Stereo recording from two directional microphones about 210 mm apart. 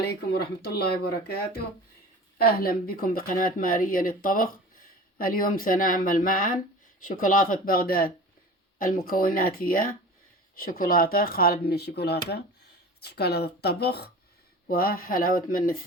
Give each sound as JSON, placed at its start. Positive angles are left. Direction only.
{"t": 0.0, "sound": "speech", "side_deg": 50}